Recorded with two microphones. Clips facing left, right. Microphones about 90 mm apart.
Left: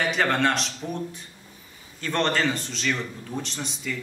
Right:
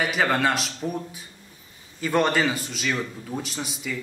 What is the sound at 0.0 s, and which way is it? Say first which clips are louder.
A man's voice: even; 5° right (ahead or behind).